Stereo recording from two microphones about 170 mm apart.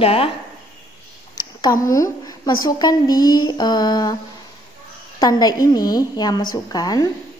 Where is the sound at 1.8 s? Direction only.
20° left (ahead or behind).